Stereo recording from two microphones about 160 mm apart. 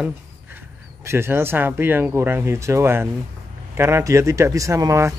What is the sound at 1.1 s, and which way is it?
Speech, 15° right (ahead or behind).